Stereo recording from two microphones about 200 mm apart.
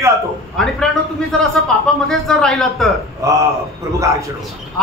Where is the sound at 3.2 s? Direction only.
15° right (ahead or behind).